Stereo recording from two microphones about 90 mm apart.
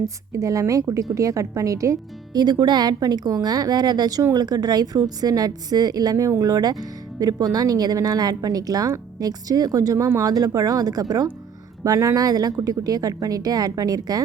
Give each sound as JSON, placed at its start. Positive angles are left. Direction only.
{"t": 0.0, "sound": "a woman's voice", "side_deg": -35}